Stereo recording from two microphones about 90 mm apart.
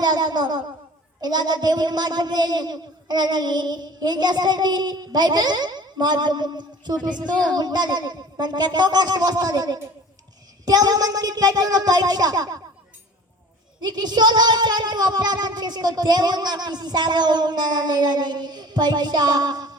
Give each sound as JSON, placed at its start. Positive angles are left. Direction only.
{"t": 0.0, "sound": "a sound", "side_deg": -50}
{"t": 1.2, "sound": "speech", "side_deg": -50}
{"t": 13.8, "sound": "speech", "side_deg": -50}